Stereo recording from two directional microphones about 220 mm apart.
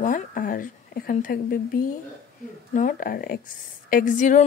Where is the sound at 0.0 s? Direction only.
40° left (ahead or behind).